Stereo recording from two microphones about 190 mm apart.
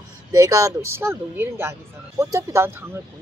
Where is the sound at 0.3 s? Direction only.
20° right (ahead or behind).